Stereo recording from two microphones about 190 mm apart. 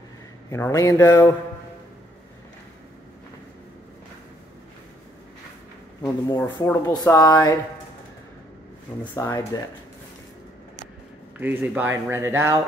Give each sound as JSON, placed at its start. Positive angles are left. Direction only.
{"t": 0.5, "sound": "speech", "side_deg": 15}
{"t": 6.0, "sound": "speech", "side_deg": 20}
{"t": 9.0, "sound": "speech", "side_deg": 15}
{"t": 11.3, "sound": "speech", "side_deg": -10}